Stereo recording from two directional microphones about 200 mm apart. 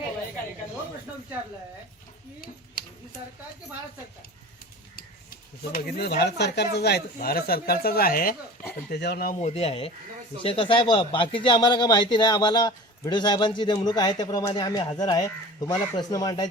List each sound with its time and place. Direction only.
5.7 s speech: 50° left (ahead or behind)
9.4 s speech: 30° left (ahead or behind)